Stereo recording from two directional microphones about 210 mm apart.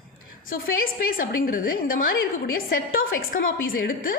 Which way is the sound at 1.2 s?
40° left (ahead or behind).